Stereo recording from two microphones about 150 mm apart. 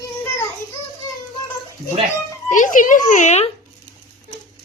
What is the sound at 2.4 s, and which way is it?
A child's voice, 60° left (ahead or behind).